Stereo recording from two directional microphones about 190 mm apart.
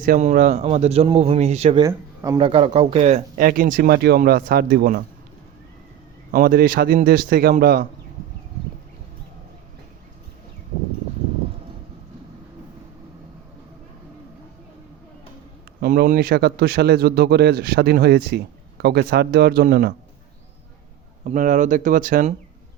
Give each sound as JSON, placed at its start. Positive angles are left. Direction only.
{"t": 0.0, "sound": "a man's voice", "side_deg": -40}
{"t": 1.8, "sound": "speech", "side_deg": -15}
{"t": 2.4, "sound": "a man's voice", "side_deg": -30}
{"t": 3.4, "sound": "speech", "side_deg": -50}
{"t": 6.3, "sound": "speech", "side_deg": -50}
{"t": 15.8, "sound": "a man's voice", "side_deg": -50}
{"t": 21.2, "sound": "speech", "side_deg": -40}